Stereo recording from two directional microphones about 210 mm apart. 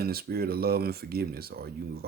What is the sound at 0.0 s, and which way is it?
Speech, 45° right (ahead or behind).